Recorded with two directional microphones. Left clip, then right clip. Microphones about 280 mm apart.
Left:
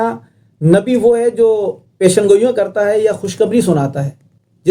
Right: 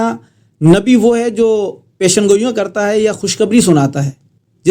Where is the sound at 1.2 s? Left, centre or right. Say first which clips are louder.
Left 1 dB; right.